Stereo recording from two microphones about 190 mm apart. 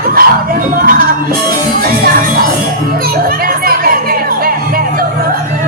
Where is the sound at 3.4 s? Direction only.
50° right (ahead or behind).